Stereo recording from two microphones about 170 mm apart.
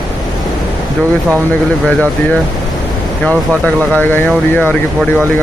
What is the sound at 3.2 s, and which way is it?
Speech, 10° left (ahead or behind).